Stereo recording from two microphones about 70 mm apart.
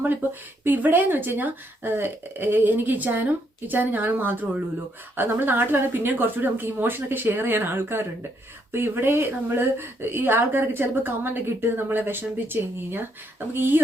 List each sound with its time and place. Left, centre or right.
0.6 s a woman's voice: right